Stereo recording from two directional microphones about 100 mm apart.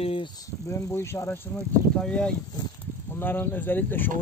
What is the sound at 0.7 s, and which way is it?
Speech, 30° left (ahead or behind).